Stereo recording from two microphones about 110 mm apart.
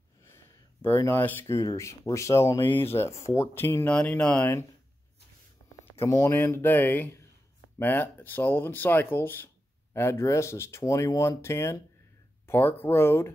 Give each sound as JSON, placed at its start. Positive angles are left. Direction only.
{"t": 1.0, "sound": "speech", "side_deg": 20}
{"t": 1.6, "sound": "speech", "side_deg": 30}
{"t": 3.9, "sound": "speech", "side_deg": 10}
{"t": 5.9, "sound": "speech", "side_deg": 25}